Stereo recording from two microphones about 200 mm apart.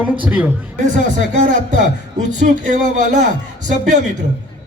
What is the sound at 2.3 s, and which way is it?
Speech, 35° right (ahead or behind).